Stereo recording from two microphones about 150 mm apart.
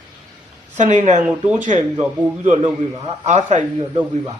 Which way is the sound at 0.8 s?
55° right (ahead or behind).